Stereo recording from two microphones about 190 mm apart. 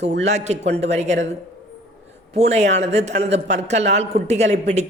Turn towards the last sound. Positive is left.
turn(degrees=-35)  # may be behind; listen again after turning